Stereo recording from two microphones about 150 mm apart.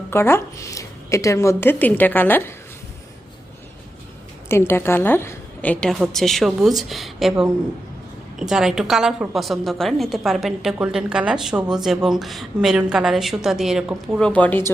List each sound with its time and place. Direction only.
0.1 s a woman's voice: 15° left (ahead or behind)
4.4 s a woman's voice: 15° left (ahead or behind); by 14.2 s 5° right (ahead or behind)
14.2 s a woman's voice: 5° left (ahead or behind)